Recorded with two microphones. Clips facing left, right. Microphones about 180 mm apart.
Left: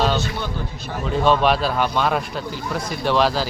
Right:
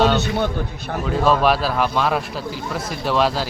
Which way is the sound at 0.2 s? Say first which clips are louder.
Right 5 dB; 55° right (ahead or behind).